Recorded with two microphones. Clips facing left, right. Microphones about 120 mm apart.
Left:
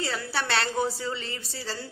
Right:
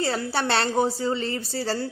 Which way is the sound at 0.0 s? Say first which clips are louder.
Right 5 dB; 30° right (ahead or behind).